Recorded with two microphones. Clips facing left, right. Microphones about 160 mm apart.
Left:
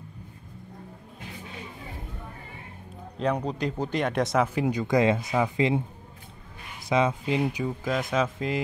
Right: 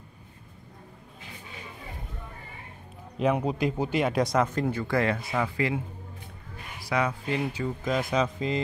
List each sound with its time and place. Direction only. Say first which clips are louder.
3.2 s speech: right 2 dB; 10° right (ahead or behind)
4.6 s speech: left 4 dB; 15° left (ahead or behind)
6.8 s speech: left 4 dB; 20° left (ahead or behind)
7.6 s speech: even; centre (ahead or behind)